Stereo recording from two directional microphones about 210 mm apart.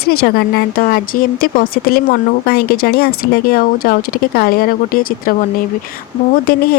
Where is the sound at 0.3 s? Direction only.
45° left (ahead or behind).